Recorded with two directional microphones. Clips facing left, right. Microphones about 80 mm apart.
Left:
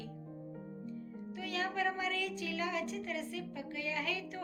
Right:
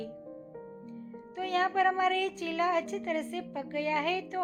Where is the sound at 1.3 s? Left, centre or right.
Right.